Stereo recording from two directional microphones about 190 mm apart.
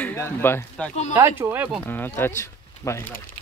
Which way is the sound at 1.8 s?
10° left (ahead or behind).